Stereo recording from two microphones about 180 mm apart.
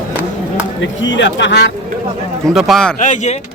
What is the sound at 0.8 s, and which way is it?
Speech, 90° left.